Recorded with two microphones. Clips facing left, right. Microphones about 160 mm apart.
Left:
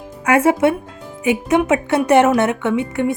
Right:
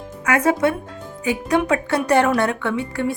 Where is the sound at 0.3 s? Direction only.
25° left (ahead or behind).